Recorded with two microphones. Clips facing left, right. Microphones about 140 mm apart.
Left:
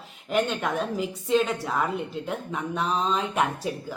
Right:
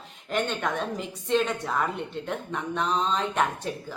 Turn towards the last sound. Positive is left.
turn(degrees=10)  # may be behind; listen again after turning